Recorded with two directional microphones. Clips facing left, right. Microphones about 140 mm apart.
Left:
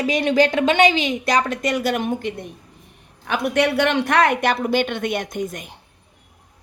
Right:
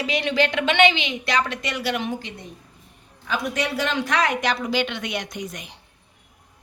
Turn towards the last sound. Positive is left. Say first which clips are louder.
# left 6 dB
turn(degrees=50)  # may be behind; listen again after turning